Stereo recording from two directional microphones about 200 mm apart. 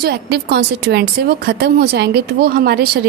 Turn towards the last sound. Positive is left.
turn(degrees=-50)  # may be behind; listen again after turning